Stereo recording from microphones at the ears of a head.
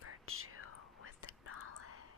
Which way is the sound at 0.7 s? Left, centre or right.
Left.